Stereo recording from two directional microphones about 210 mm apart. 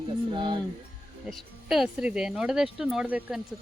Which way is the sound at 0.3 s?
20° right (ahead or behind).